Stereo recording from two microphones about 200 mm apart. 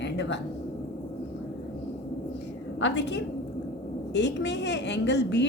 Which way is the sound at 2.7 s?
60° left (ahead or behind).